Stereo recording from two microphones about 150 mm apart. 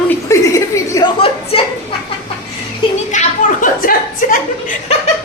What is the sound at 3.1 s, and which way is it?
A woman's voice, 60° left (ahead or behind).